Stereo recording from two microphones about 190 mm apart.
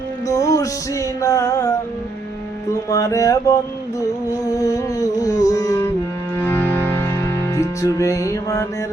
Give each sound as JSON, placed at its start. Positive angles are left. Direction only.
{"t": 0.3, "sound": "music", "side_deg": 15}
{"t": 2.9, "sound": "music", "side_deg": 15}